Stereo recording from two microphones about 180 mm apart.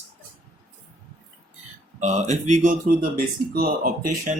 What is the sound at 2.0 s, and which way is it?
Speech, 40° right (ahead or behind).